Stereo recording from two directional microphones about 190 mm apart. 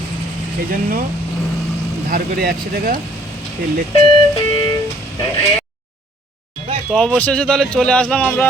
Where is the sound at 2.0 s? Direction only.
50° right (ahead or behind).